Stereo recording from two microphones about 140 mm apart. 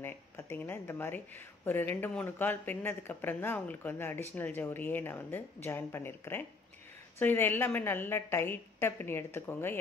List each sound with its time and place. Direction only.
0.0 s speech: 15° left (ahead or behind)